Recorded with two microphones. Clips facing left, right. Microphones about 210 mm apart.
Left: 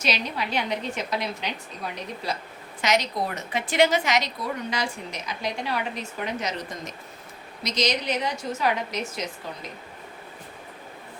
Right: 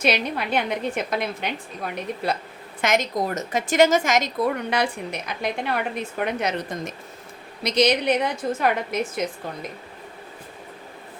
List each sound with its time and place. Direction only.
0.0 s a woman's voice: 55° right (ahead or behind)
2.8 s a woman's voice: 50° right (ahead or behind)